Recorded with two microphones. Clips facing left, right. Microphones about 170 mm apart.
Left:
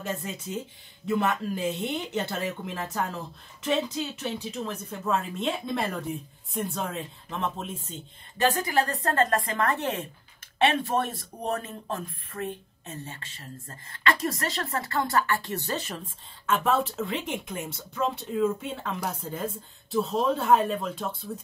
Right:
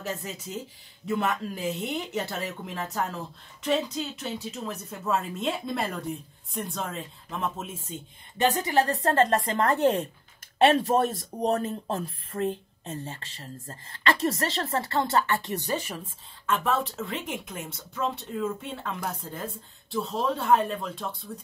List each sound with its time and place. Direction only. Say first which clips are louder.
0.0 s a woman's voice: left 1 dB; centre (ahead or behind)
8.4 s speech: even; 20° right (ahead or behind)
8.7 s speech: right 2 dB; 30° right (ahead or behind); by 16.1 s 10° right (ahead or behind)
16.4 s a woman's voice: left 2 dB; centre (ahead or behind)